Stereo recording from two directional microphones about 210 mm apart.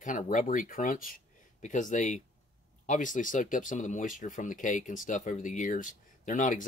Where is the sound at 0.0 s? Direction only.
40° left (ahead or behind).